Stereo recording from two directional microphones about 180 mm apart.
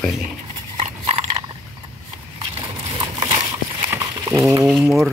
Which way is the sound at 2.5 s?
30° right (ahead or behind).